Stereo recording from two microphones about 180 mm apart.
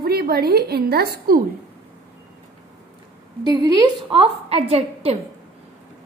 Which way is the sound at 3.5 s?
25° right (ahead or behind).